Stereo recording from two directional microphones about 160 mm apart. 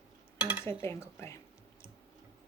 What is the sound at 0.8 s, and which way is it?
Speech, 15° left (ahead or behind).